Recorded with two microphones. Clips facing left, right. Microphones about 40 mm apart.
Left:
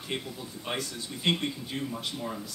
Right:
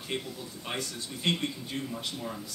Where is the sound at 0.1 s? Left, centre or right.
Centre.